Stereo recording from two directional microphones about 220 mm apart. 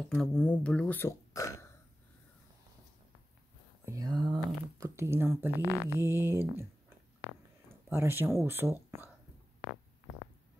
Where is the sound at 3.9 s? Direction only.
15° right (ahead or behind).